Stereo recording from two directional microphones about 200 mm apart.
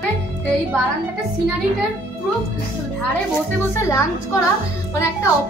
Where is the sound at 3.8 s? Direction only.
15° left (ahead or behind).